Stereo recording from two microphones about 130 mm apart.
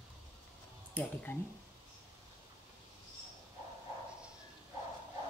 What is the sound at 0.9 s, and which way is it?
Speech, 15° left (ahead or behind).